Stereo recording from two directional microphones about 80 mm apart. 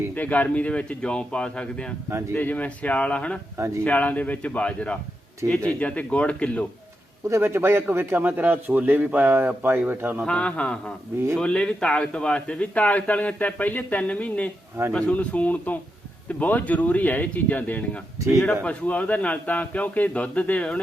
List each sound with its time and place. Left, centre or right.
0.1 s a man's voice: left
5.4 s speech: right
5.8 s a man's voice: centre
7.3 s a man's voice: right
10.2 s a man's voice: centre